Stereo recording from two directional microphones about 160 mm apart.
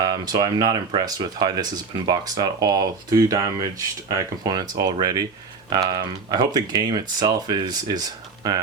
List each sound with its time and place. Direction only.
0.0 s speech: 25° right (ahead or behind)